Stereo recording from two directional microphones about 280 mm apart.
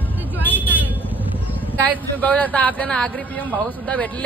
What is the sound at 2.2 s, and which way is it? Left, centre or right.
Speech, centre.